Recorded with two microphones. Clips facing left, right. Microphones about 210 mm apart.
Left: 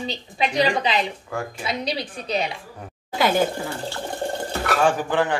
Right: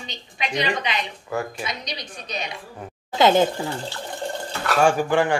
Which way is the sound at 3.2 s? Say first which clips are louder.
Right 3 dB; 20° right (ahead or behind).